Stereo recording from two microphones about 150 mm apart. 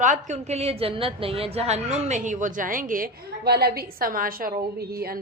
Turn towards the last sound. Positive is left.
turn(degrees=-90)